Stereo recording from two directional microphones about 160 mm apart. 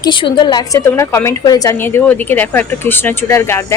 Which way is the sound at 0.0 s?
30° left (ahead or behind).